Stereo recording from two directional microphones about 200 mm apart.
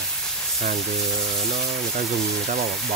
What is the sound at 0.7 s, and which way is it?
Speech, centre (ahead or behind).